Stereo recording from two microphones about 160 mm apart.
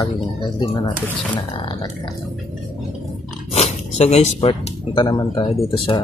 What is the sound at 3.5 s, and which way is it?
Zipper, 40° left (ahead or behind).